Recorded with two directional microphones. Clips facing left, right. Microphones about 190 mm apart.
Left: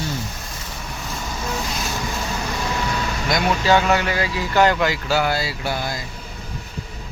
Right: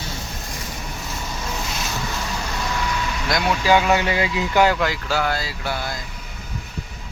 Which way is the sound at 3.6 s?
10° right (ahead or behind).